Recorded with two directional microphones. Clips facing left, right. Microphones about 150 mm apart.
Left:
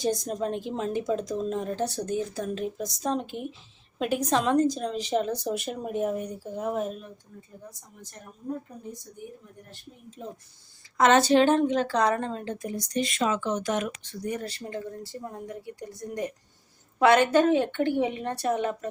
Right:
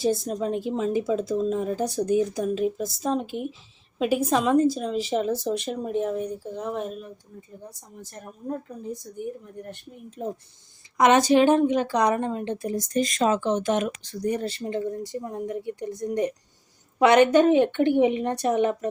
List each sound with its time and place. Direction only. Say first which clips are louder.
0.0 s a woman's voice: right 3 dB; 5° right (ahead or behind)
10.9 s a woman's voice: right 2 dB; 15° right (ahead or behind)
12.6 s speech: right 4 dB; 45° right (ahead or behind); by 13.9 s 25° right (ahead or behind)
14.0 s speech: right 6 dB; 35° right (ahead or behind); by 18.9 s 20° right (ahead or behind)